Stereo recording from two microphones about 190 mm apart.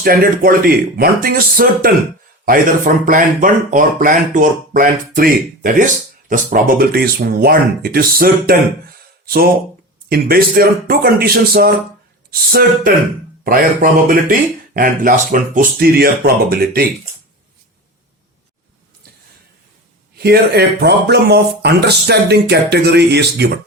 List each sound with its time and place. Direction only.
0.0 s speech: 50° right (ahead or behind)
10.1 s speech: 50° right (ahead or behind)
20.1 s speech: 55° right (ahead or behind)